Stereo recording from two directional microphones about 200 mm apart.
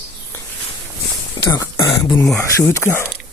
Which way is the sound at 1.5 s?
20° left (ahead or behind).